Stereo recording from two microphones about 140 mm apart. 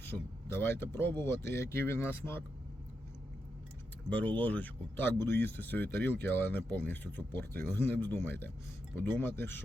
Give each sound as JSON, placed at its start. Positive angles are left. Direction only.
{"t": 0.1, "sound": "speech", "side_deg": 20}
{"t": 4.1, "sound": "speech", "side_deg": 10}